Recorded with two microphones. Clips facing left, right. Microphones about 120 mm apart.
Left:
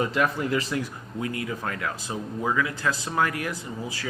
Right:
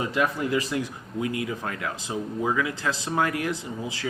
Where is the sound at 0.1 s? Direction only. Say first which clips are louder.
Even; 15° right (ahead or behind).